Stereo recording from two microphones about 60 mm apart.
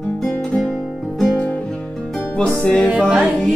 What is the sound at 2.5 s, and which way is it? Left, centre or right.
Music, centre.